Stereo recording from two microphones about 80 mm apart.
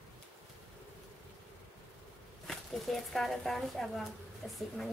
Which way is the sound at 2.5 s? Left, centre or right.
Centre.